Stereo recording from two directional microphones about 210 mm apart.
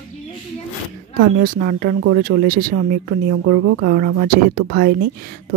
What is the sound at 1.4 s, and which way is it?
Speech, 45° right (ahead or behind).